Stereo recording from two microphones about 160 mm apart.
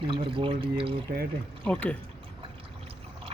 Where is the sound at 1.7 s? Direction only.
10° left (ahead or behind).